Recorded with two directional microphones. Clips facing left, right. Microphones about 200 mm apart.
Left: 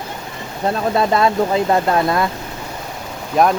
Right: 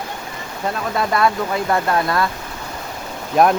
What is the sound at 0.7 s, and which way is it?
Speech, 30° left (ahead or behind).